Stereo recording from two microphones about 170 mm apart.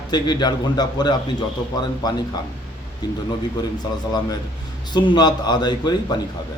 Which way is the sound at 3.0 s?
25° left (ahead or behind).